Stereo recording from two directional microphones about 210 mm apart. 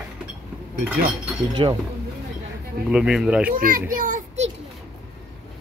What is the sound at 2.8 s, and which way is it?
Speech, 5° right (ahead or behind).